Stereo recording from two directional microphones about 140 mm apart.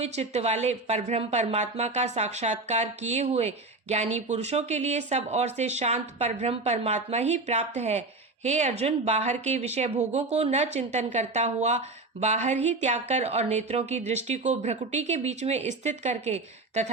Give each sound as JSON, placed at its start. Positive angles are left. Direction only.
{"t": 0.0, "sound": "speech", "side_deg": -50}